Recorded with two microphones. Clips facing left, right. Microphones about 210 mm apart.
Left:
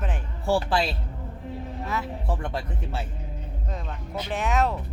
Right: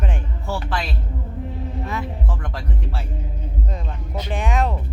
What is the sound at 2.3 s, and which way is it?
Speech, 25° left (ahead or behind).